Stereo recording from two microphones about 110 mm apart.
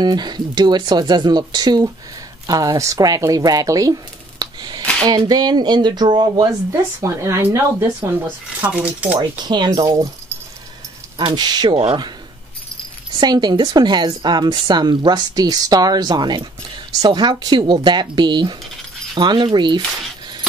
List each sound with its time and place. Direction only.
0.0 s a woman's voice: 40° right (ahead or behind)
4.4 s a sound: 40° right (ahead or behind)
5.0 s a woman's voice: 40° right (ahead or behind)
6.7 s speech: 25° right (ahead or behind)
8.5 s speech: 15° right (ahead or behind)
9.4 s a woman's voice: 40° right (ahead or behind)
11.1 s a woman's voice: 40° right (ahead or behind)
11.7 s speech: 65° right (ahead or behind)
13.2 s a woman's voice: 40° right (ahead or behind)